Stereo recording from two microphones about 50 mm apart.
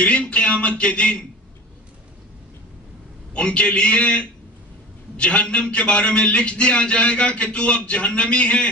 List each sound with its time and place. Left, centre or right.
0.0 s a man's voice: left
3.3 s a man's voice: left